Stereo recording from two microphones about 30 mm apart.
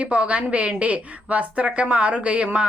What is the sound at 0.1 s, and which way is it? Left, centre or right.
A woman's voice, right.